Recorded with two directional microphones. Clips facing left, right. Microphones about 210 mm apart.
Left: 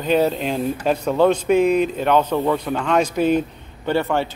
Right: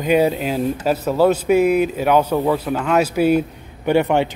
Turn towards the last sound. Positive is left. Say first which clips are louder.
# right 4 dB
turn(degrees=-20)  # may be behind; listen again after turning